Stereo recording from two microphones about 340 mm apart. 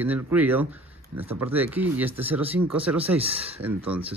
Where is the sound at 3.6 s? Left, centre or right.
Centre.